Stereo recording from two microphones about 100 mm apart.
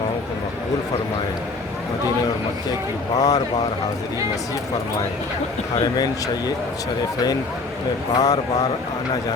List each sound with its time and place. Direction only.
3.2 s speech: 40° left (ahead or behind)
5.8 s speech: 40° left (ahead or behind)
8.1 s speech: 35° left (ahead or behind)